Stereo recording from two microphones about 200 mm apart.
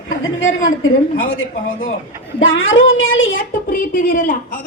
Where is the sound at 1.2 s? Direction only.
80° left.